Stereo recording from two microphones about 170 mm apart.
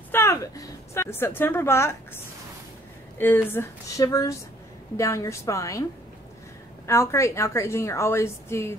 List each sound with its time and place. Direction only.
0.1 s a woman's voice: 15° left (ahead or behind)
3.2 s a woman's voice: 10° left (ahead or behind)
6.9 s a woman's voice: 15° left (ahead or behind)